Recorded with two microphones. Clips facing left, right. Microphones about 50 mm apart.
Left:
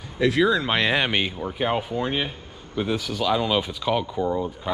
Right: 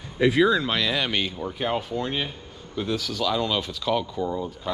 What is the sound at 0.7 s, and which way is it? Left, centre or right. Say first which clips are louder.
Speech: left 3 dB; left.